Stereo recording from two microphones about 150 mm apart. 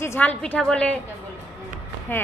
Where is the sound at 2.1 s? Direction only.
15° left (ahead or behind).